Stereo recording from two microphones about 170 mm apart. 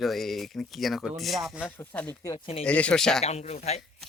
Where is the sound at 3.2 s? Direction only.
40° left (ahead or behind).